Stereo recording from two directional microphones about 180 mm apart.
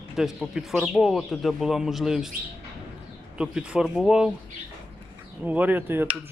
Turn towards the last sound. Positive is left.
turn(degrees=-10)  # may be behind; listen again after turning